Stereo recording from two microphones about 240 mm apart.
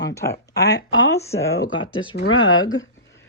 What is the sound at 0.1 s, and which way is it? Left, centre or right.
Speech, centre.